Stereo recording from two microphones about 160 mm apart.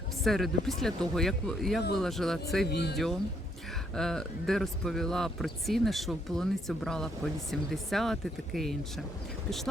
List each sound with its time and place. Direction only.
0.3 s speech: centre (ahead or behind)
2.6 s speech: 90° left
3.9 s speech: 5° left (ahead or behind)